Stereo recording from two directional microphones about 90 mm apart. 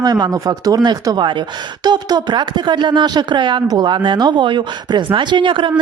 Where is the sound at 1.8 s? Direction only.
50° right (ahead or behind).